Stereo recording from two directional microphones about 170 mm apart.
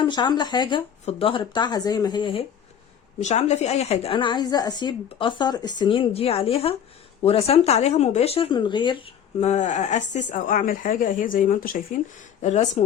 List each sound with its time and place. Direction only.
0.0 s speech: 25° left (ahead or behind)
3.2 s speech: 40° left (ahead or behind)